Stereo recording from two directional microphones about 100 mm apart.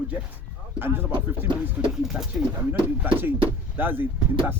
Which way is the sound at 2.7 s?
20° right (ahead or behind).